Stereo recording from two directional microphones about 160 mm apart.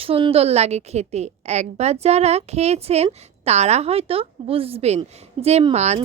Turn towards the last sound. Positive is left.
turn(degrees=-45)  # may be behind; listen again after turning